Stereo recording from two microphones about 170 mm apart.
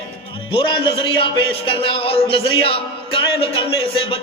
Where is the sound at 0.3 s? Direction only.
30° left (ahead or behind).